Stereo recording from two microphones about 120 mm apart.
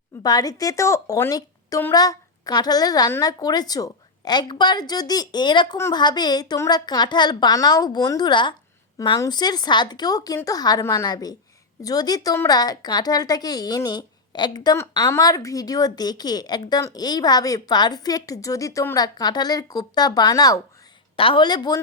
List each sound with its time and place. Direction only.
0.2 s a woman's voice: 35° left (ahead or behind)
1.3 s a sound: 30° left (ahead or behind)
1.9 s a woman's voice: 30° left (ahead or behind)
21.2 s a woman's voice: 45° left (ahead or behind)